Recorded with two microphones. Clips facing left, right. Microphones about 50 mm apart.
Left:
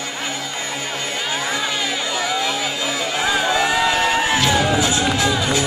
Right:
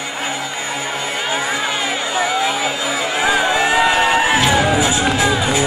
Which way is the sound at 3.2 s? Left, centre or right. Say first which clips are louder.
Right 3 dB; centre.